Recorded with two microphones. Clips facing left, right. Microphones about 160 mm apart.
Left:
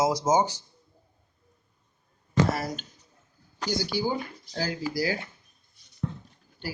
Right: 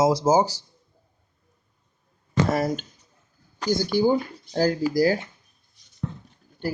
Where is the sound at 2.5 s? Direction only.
50° right (ahead or behind).